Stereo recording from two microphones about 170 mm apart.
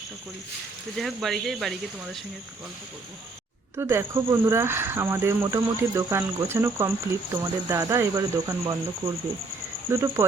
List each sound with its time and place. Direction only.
0.9 s speech: centre (ahead or behind)
3.8 s speech: 15° right (ahead or behind)
9.9 s speech: 15° right (ahead or behind)